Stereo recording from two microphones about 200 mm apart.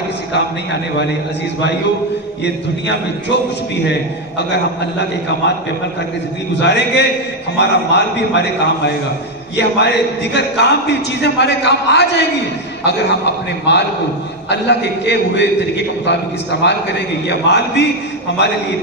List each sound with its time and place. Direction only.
0.3 s a man's voice: 55° left (ahead or behind)
2.4 s a man's voice: 60° left (ahead or behind)
6.6 s a man's voice: 60° left (ahead or behind)
13.7 s a man's voice: 60° left (ahead or behind)